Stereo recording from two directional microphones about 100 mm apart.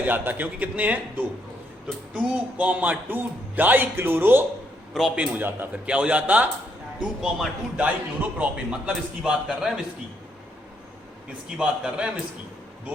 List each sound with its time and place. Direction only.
0.0 s speech: 20° right (ahead or behind)
4.9 s speech: 10° right (ahead or behind)
11.5 s speech: 10° right (ahead or behind)